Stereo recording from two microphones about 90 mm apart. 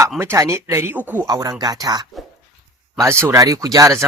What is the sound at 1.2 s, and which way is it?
Speech, 45° right (ahead or behind).